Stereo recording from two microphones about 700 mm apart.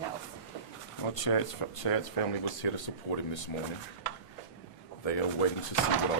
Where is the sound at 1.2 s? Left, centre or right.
Left.